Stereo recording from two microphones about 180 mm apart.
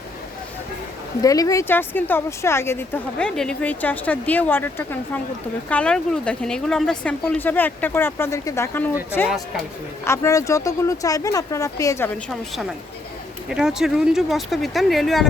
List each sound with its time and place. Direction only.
1.2 s speech: 20° left (ahead or behind)
10.0 s speech: 15° left (ahead or behind)
13.5 s speech: 5° right (ahead or behind)